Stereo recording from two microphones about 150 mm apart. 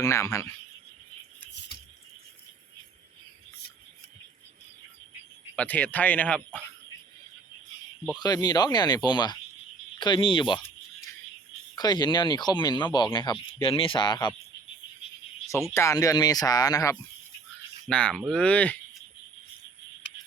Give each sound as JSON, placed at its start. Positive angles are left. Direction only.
{"t": 0.0, "sound": "speech", "side_deg": 20}
{"t": 5.5, "sound": "speech", "side_deg": 10}
{"t": 8.2, "sound": "speech", "side_deg": 25}
{"t": 11.8, "sound": "speech", "side_deg": 30}
{"t": 15.7, "sound": "speech", "side_deg": 20}
{"t": 17.8, "sound": "speech", "side_deg": 5}